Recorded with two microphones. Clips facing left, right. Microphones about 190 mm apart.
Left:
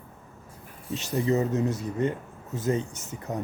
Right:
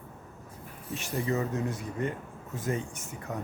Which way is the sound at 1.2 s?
25° left (ahead or behind).